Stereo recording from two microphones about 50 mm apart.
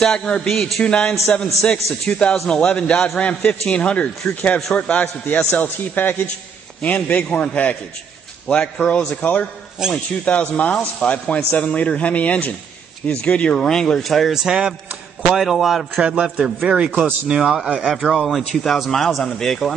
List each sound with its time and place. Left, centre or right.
0.0 s a man's voice: centre
9.8 s a man's voice: centre
10.2 s speech: left
13.6 s speech: centre
14.3 s a man's voice: centre
16.0 s a man's voice: centre
18.1 s speech: centre